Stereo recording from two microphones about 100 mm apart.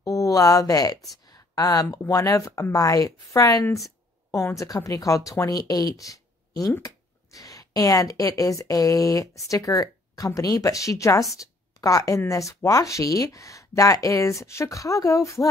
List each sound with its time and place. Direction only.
0.0 s a woman's voice: 35° left (ahead or behind)
3.6 s a sound: 35° left (ahead or behind)
4.6 s a woman's voice: 30° left (ahead or behind)